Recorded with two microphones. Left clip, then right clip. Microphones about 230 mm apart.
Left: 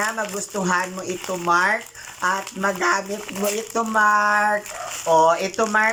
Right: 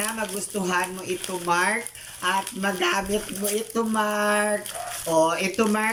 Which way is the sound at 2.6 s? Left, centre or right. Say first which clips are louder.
Left 3 dB; centre.